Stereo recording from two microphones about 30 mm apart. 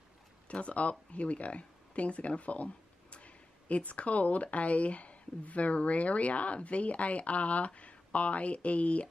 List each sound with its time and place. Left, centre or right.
0.5 s speech: left